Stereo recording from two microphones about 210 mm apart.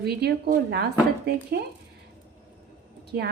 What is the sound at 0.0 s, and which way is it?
Speech, 50° right (ahead or behind).